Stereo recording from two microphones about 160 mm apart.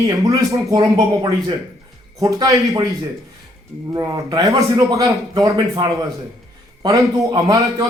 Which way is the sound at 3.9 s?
20° right (ahead or behind).